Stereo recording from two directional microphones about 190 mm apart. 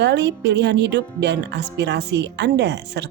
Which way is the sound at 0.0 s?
65° right (ahead or behind).